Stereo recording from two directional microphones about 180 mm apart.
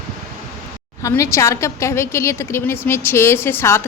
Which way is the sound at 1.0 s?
15° left (ahead or behind).